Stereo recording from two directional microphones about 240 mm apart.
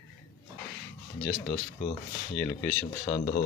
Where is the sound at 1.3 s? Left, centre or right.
Left.